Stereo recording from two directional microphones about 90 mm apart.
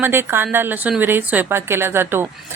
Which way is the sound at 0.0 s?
25° right (ahead or behind).